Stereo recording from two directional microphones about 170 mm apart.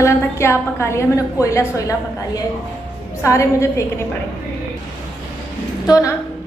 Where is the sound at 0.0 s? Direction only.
15° left (ahead or behind).